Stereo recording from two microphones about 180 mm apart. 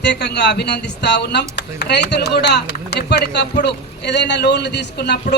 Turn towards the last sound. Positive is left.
turn(degrees=65)  # may be behind; listen again after turning